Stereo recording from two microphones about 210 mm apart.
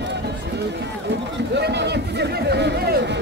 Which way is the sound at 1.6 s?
55° right (ahead or behind).